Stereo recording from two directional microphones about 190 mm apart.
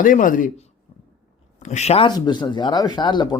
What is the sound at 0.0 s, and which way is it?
Speech, 45° left (ahead or behind).